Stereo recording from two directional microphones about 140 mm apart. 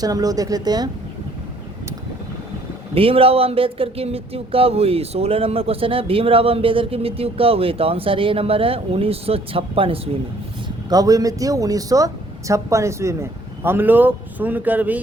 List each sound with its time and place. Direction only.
0.0 s speech: 25° right (ahead or behind)
2.9 s speech: 40° right (ahead or behind)
10.8 s speech: 25° right (ahead or behind)